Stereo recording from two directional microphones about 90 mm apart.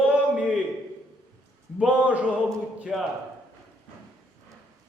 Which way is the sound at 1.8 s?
10° right (ahead or behind).